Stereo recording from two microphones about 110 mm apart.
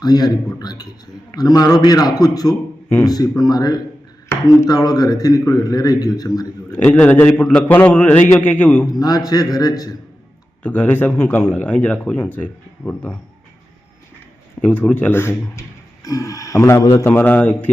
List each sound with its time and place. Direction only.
0.0 s a man's voice: 35° left (ahead or behind)
6.7 s speech: 15° left (ahead or behind)
8.9 s a man's voice: 35° left (ahead or behind)
10.6 s speech: 15° left (ahead or behind)
14.6 s speech: 15° left (ahead or behind)
17.2 s speech: 15° left (ahead or behind)